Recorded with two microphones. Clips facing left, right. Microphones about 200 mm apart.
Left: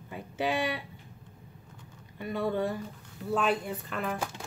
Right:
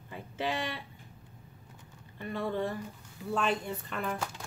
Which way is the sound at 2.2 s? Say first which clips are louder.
Left 3 dB; 10° left (ahead or behind).